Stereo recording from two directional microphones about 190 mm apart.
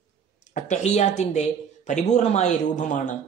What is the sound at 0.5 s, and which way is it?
Speech, 40° left (ahead or behind).